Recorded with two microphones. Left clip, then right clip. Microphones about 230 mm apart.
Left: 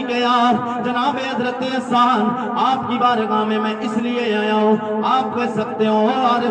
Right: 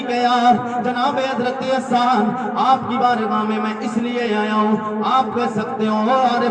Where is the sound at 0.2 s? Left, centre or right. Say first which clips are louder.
Right 1 dB; centre.